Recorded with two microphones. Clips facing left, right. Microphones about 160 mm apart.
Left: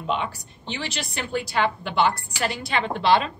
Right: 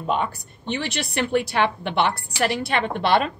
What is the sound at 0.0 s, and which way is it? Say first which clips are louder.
A woman's voice: right 3 dB; 45° right (ahead or behind).